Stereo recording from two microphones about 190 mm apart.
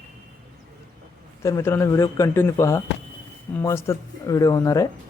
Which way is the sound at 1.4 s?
15° left (ahead or behind).